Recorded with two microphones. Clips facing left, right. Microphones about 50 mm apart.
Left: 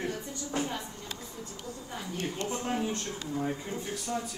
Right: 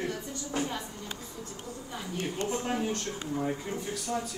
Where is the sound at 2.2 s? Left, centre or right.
Right.